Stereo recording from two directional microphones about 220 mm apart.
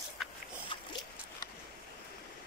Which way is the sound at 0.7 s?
20° left (ahead or behind).